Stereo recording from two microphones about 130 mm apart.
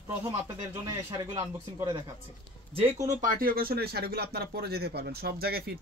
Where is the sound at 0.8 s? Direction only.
30° right (ahead or behind).